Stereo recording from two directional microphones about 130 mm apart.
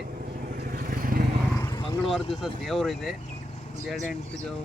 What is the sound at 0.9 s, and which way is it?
Vehicle, 90° right.